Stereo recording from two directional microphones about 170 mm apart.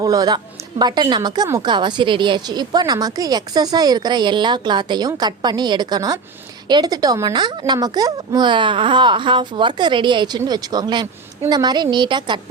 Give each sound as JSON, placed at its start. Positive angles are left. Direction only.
{"t": 0.0, "sound": "a woman's voice", "side_deg": -20}